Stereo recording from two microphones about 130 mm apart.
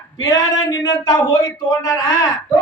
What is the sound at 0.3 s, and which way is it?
Male singing, 30° left (ahead or behind).